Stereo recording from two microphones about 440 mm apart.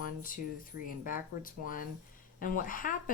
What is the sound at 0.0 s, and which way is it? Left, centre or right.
Speech, centre.